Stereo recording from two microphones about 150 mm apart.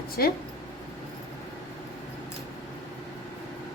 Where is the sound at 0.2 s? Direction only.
90° left.